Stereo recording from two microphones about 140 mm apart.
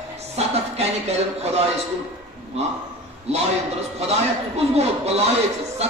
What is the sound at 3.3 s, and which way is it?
Speech, 50° right (ahead or behind).